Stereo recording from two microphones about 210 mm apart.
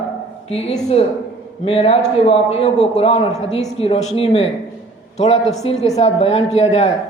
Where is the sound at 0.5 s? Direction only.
30° left (ahead or behind).